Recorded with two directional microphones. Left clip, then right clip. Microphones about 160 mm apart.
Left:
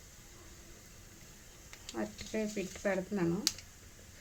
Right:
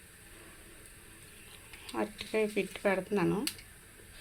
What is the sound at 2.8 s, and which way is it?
Speech, 15° right (ahead or behind).